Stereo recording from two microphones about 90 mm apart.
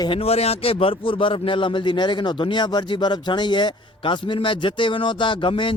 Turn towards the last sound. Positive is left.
turn(degrees=65)  # may be behind; listen again after turning